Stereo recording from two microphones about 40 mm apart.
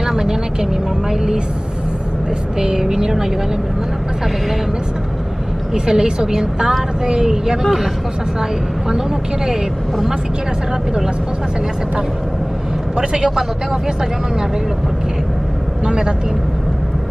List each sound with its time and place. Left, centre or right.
0.0 s vehicle: centre
2.6 s a woman's voice: centre
5.9 s a woman's voice: centre
7.6 s a woman's voice: centre
12.9 s speech: centre